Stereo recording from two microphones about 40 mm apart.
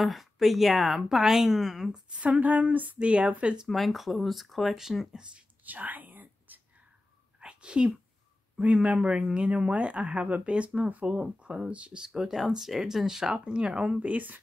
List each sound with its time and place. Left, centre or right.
0.0 s speech: centre
2.0 s speech: right
3.6 s speech: centre
5.0 s speech: right
5.7 s whispering: right
7.3 s a sound: right
8.5 s speech: right
10.8 s speech: right
11.1 s speech: right
12.4 s speech: centre; by 13.9 s right
13.9 s speech: right